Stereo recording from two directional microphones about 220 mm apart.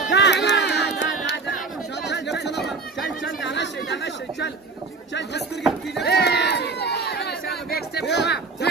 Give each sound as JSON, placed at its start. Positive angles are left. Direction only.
{"t": 0.1, "sound": "music", "side_deg": 50}
{"t": 3.3, "sound": "chatter", "side_deg": 55}
{"t": 5.6, "sound": "a sound", "side_deg": 0}
{"t": 6.0, "sound": "crowd", "side_deg": 50}